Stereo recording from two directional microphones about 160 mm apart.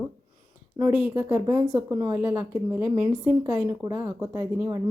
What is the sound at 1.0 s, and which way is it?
A woman's voice, 15° right (ahead or behind).